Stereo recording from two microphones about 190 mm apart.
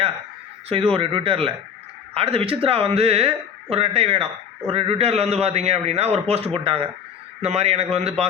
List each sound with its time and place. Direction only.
0.9 s a man's voice: 30° right (ahead or behind)